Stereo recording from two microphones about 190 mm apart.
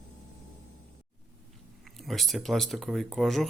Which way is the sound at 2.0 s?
Centre (ahead or behind).